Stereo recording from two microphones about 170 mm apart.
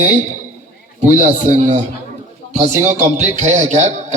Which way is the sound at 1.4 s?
45° right (ahead or behind).